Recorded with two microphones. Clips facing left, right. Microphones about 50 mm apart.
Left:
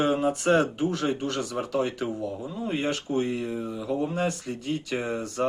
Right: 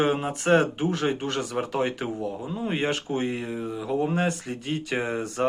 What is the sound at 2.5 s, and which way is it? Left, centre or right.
Speech, right.